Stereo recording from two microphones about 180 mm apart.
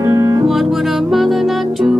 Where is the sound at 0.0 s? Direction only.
15° right (ahead or behind).